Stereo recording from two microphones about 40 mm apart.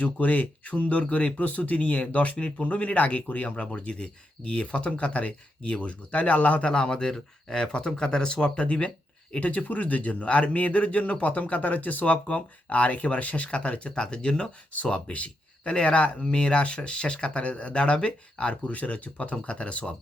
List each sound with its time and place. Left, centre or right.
0.0 s a man's voice: left
6.7 s speech: left
8.6 s a man's voice: left
13.9 s speech: left